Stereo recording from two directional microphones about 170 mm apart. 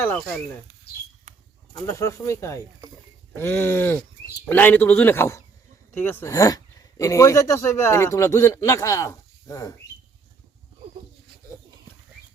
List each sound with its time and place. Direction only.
1.9 s speech: 15° left (ahead or behind)